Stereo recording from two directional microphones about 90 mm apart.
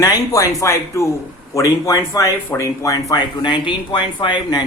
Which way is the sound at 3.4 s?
60° left (ahead or behind).